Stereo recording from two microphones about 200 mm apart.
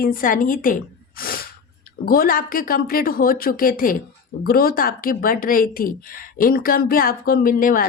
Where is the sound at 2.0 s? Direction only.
45° left (ahead or behind).